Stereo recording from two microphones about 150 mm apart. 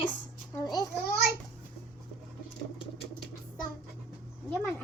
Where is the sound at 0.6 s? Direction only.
25° left (ahead or behind).